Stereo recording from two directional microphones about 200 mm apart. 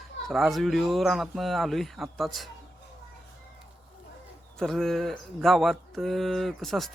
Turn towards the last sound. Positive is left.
turn(degrees=0)  # may be behind; listen again after turning